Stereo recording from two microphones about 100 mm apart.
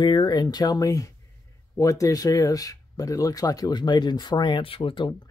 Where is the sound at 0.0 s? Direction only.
50° left (ahead or behind).